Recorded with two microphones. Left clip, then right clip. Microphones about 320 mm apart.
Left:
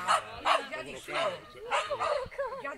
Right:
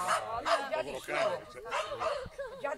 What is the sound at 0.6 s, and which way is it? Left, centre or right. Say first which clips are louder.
Bow-wow: right 5 dB; right.